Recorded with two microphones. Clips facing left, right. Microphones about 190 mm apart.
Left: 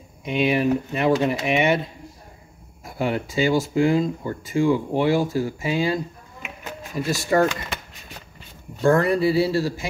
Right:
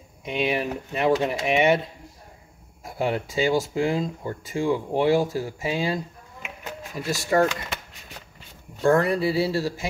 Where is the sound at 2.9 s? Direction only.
30° right (ahead or behind).